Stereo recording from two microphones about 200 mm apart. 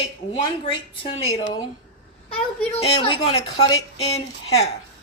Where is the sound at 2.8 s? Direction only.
30° left (ahead or behind).